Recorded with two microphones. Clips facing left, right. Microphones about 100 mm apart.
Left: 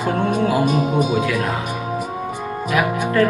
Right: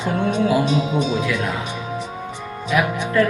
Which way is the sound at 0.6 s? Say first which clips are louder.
Left 2 dB; 50° left (ahead or behind).